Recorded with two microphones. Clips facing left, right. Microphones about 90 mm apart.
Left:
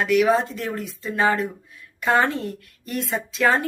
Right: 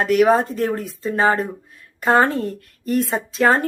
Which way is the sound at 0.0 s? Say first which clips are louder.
Right 3 dB; 40° right (ahead or behind).